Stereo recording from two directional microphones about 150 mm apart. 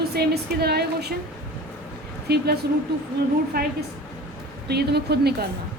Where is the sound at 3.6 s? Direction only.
90° right.